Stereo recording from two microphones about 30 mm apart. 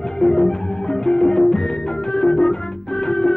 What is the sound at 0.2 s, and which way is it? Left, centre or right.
Music, left.